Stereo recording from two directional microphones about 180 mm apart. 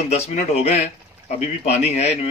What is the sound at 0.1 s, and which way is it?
Speech, 35° left (ahead or behind).